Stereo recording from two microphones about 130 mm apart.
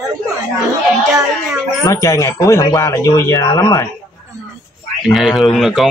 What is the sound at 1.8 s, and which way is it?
A man's voice, 25° left (ahead or behind).